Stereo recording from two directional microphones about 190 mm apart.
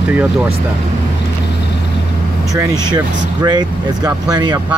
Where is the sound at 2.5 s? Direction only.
20° right (ahead or behind).